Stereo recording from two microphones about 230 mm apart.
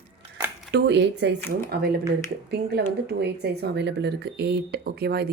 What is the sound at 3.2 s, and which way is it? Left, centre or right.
A woman's voice, right.